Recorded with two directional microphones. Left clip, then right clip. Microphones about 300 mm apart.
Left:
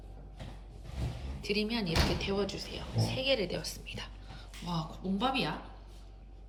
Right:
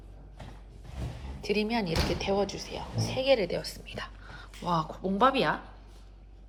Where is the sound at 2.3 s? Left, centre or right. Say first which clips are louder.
Right 5 dB; left.